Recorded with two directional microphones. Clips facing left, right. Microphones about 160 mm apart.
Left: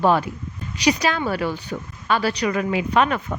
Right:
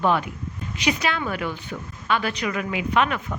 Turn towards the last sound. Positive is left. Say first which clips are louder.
# left 3 dB
turn(degrees=40)  # may be behind; listen again after turning